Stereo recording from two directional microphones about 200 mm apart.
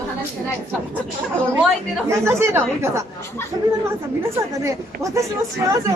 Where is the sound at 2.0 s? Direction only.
15° right (ahead or behind).